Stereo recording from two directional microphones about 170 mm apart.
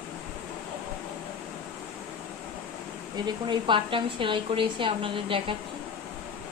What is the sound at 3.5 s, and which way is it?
A woman's voice, 30° right (ahead or behind).